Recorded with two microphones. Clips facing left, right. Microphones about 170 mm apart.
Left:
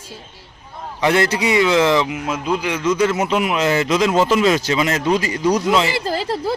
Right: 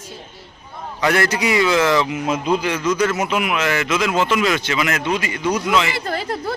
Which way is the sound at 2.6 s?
20° left (ahead or behind).